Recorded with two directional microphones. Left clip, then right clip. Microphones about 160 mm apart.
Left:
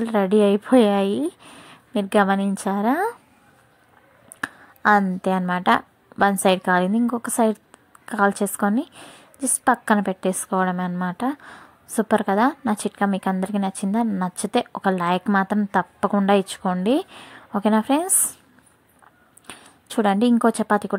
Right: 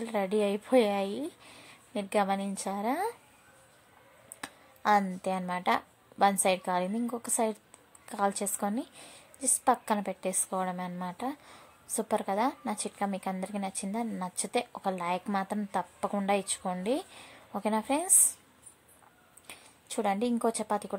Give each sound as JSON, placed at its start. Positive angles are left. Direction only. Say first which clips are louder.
{"t": 0.0, "sound": "a woman's voice", "louder": "left 11 dB", "side_deg": 20}
{"t": 4.4, "sound": "a sound", "louder": "left 13 dB", "side_deg": 20}
{"t": 5.2, "sound": "a woman's voice", "louder": "left 10 dB", "side_deg": 20}
{"t": 19.4, "sound": "speech", "louder": "left 8 dB", "side_deg": 25}